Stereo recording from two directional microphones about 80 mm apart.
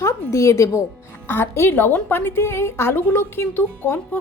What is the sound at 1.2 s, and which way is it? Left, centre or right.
A woman's voice, left.